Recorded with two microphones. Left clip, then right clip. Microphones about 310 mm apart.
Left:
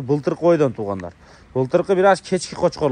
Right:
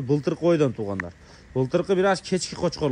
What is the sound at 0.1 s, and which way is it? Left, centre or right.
Speech, centre.